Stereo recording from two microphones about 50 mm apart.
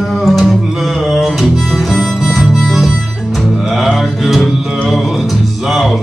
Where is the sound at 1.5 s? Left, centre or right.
Centre.